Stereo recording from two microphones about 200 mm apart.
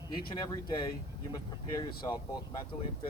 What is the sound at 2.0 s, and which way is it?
Speech, 20° left (ahead or behind).